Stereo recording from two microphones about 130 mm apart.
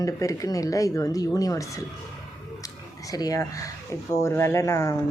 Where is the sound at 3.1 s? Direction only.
30° left (ahead or behind).